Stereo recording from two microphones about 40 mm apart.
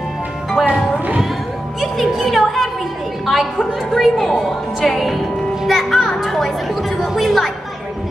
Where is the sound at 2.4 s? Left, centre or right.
Centre.